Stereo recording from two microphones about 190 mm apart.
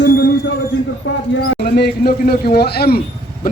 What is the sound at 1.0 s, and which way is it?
A man's voice, 70° left (ahead or behind).